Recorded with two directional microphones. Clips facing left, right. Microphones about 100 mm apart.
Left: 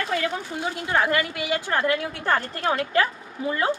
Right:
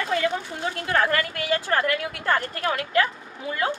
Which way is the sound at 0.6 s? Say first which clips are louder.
Even; 15° left (ahead or behind).